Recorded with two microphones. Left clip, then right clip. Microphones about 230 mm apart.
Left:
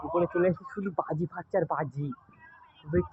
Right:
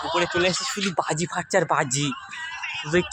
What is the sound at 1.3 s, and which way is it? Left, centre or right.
Speech, right.